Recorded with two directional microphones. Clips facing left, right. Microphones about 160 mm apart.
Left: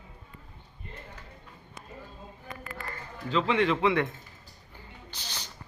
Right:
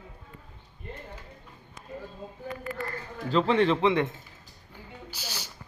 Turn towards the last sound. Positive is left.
turn(degrees=-5)  # may be behind; listen again after turning